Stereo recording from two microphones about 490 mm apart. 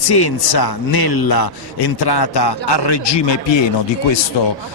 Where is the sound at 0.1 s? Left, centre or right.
Left.